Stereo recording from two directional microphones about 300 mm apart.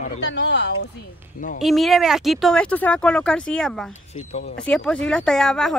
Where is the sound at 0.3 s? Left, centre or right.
Left.